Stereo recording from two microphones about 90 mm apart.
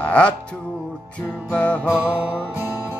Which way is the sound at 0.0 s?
15° left (ahead or behind).